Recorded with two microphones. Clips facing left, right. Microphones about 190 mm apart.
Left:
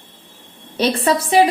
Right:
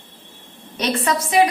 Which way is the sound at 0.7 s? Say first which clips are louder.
Left 4 dB; 30° left (ahead or behind).